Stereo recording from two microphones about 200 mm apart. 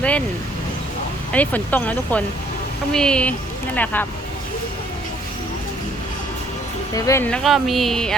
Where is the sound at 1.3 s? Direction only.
10° left (ahead or behind).